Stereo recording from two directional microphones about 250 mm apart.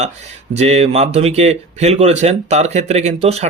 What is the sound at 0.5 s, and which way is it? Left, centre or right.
Speech, right.